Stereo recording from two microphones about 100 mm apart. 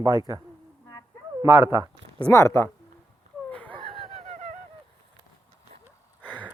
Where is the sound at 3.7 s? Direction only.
65° right (ahead or behind).